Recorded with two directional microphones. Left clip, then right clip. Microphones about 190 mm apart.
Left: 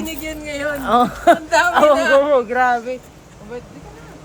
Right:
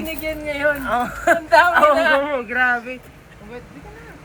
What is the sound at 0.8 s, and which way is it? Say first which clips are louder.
Speech: left 6 dB; 55° left (ahead or behind).